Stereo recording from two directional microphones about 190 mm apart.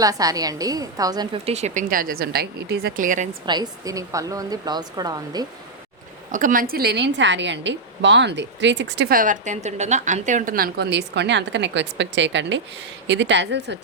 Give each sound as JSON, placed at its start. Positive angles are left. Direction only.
{"t": 0.0, "sound": "a woman's voice", "side_deg": -20}
{"t": 3.4, "sound": "speech", "side_deg": -20}
{"t": 6.3, "sound": "a woman's voice", "side_deg": -45}